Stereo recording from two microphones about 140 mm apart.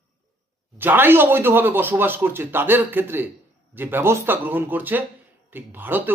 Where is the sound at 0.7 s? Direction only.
15° right (ahead or behind).